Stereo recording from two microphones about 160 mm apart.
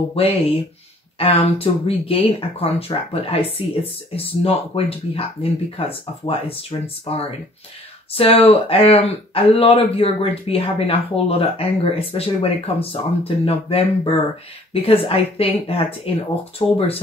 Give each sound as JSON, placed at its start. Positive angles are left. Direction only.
{"t": 0.1, "sound": "speech", "side_deg": 35}